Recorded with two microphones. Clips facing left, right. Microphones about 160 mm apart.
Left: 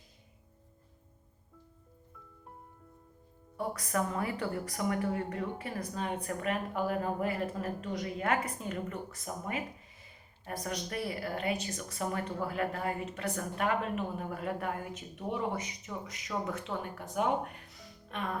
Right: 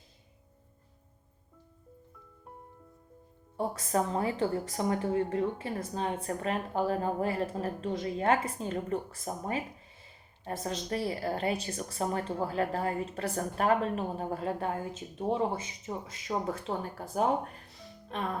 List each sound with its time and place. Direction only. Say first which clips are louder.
3.6 s a woman's voice: right 3 dB; 25° right (ahead or behind)